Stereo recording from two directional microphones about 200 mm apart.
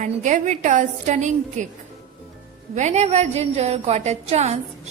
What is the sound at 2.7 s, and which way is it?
Music, 35° right (ahead or behind).